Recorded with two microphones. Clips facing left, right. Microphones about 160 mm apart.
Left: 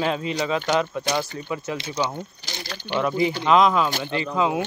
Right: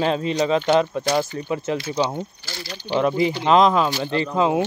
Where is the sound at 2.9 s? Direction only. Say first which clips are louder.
Right 3 dB; 25° right (ahead or behind).